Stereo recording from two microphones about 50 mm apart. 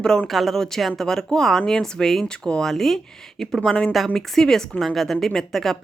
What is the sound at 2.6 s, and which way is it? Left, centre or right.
A woman's voice, centre.